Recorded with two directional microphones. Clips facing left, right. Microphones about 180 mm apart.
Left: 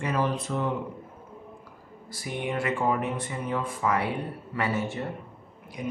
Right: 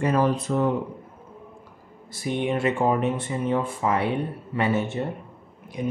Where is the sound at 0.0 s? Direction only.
40° right (ahead or behind).